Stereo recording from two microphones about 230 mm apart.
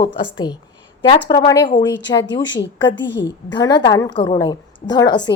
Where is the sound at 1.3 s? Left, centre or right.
Centre.